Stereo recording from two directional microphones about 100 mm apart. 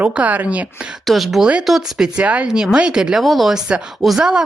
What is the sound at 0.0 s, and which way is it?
Speech, 15° right (ahead or behind).